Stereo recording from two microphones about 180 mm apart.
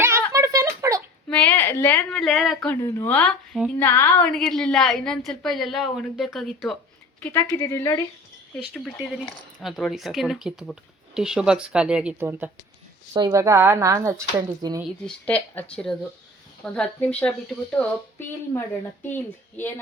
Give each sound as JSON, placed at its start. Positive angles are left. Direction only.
{"t": 0.0, "sound": "a sound", "side_deg": -15}
{"t": 1.3, "sound": "a woman's voice", "side_deg": 5}
{"t": 3.8, "sound": "speech", "side_deg": 15}
{"t": 8.5, "sound": "a woman's voice", "side_deg": 0}
{"t": 15.0, "sound": "speech", "side_deg": 10}